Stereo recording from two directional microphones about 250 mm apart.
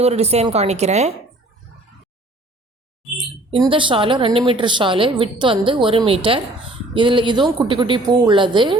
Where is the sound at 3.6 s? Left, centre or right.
Right.